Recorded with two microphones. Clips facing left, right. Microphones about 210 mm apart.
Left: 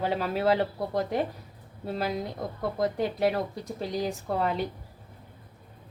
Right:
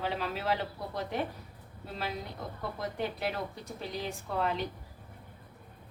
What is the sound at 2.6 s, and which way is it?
Speech, 40° left (ahead or behind).